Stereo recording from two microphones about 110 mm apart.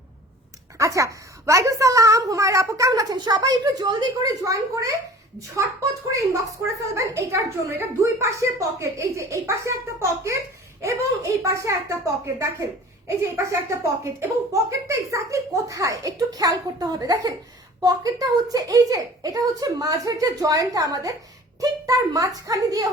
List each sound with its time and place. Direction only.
0.8 s speech: 30° right (ahead or behind)
6.1 s a woman's voice: 30° right (ahead or behind)